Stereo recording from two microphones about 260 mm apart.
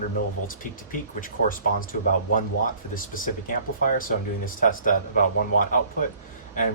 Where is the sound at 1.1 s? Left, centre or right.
Left.